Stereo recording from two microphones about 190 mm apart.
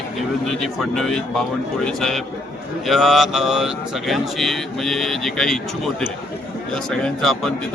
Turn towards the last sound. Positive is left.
turn(degrees=0)  # may be behind; listen again after turning